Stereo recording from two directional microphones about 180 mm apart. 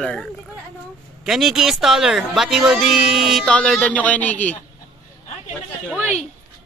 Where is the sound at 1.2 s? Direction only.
Centre (ahead or behind).